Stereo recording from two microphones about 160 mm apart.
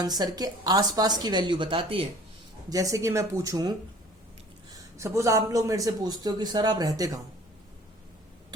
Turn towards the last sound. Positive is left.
turn(degrees=-25)  # may be behind; listen again after turning